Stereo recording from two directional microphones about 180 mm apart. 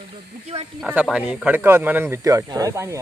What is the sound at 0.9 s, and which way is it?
Speech, 5° right (ahead or behind).